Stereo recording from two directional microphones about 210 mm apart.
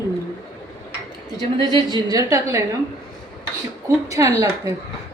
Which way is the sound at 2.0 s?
15° right (ahead or behind).